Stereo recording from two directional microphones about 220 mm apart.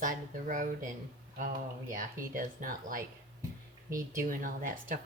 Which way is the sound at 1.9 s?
40° right (ahead or behind).